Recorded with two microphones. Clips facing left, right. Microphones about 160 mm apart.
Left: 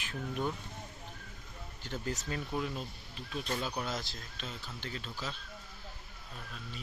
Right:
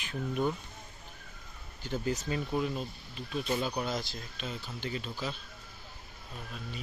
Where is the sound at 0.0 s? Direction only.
5° right (ahead or behind).